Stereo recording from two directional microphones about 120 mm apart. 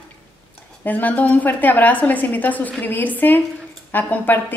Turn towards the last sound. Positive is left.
turn(degrees=15)  # may be behind; listen again after turning